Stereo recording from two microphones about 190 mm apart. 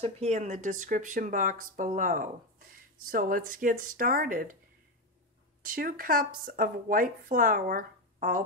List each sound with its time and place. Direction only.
0.0 s speech: 35° right (ahead or behind)
5.6 s speech: 50° right (ahead or behind)